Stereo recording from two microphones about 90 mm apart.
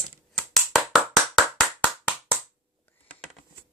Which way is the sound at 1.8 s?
20° left (ahead or behind).